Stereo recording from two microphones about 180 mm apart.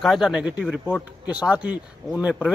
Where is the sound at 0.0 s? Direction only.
Centre (ahead or behind).